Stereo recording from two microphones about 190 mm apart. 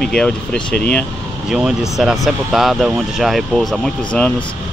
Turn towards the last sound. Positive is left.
turn(degrees=5)  # may be behind; listen again after turning